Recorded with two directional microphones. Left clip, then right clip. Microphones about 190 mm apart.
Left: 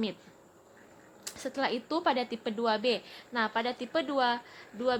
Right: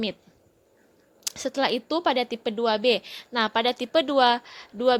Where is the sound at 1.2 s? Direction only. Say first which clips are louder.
Right 7 dB; 35° right (ahead or behind).